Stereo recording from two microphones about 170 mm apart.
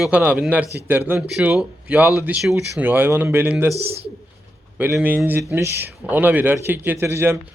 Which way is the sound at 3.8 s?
35° right (ahead or behind).